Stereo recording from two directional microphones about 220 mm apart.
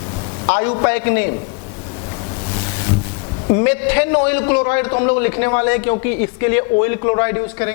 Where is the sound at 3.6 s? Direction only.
15° left (ahead or behind).